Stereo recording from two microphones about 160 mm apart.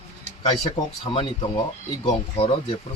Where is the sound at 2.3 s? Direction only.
35° left (ahead or behind).